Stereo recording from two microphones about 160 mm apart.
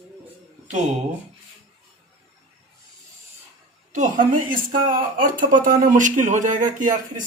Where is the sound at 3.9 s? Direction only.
55° right (ahead or behind).